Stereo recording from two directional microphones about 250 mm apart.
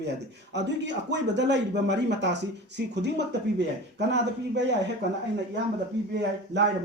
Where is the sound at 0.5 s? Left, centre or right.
Right.